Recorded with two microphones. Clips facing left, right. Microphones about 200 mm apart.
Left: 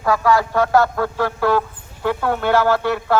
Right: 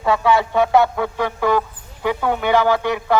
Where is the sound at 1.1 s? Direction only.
15° right (ahead or behind).